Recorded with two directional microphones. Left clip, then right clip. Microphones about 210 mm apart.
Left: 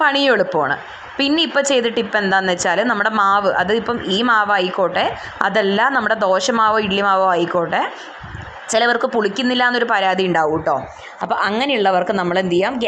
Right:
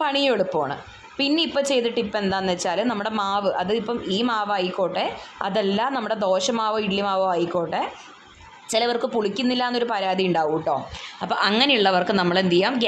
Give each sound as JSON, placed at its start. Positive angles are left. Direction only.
{"t": 0.0, "sound": "a woman's voice", "side_deg": 5}